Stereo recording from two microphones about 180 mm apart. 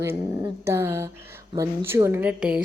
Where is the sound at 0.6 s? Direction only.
15° right (ahead or behind).